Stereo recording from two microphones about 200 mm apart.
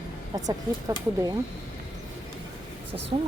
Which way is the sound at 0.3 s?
15° right (ahead or behind).